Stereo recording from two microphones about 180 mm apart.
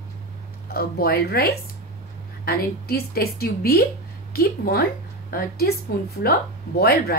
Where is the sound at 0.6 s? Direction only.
55° left (ahead or behind).